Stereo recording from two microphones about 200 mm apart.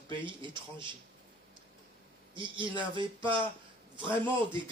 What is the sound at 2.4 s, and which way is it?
A man's voice, 25° right (ahead or behind).